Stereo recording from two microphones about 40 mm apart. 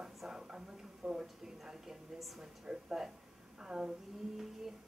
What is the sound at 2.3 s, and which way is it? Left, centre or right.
Speech, centre.